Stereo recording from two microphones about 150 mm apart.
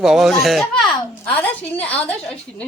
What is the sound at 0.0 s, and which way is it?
A woman's voice, centre (ahead or behind).